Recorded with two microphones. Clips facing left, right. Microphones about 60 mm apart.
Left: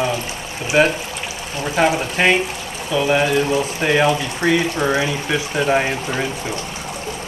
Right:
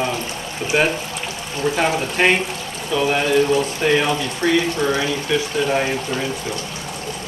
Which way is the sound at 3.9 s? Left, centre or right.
Centre.